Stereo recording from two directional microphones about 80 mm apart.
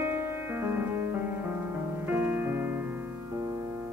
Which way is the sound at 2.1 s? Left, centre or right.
Right.